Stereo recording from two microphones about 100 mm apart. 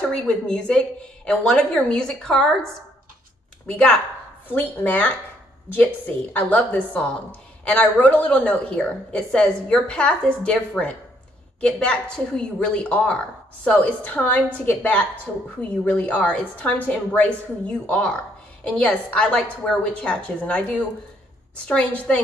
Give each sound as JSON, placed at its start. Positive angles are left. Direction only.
{"t": 0.1, "sound": "a woman's voice", "side_deg": 10}
{"t": 3.6, "sound": "a woman's voice", "side_deg": 10}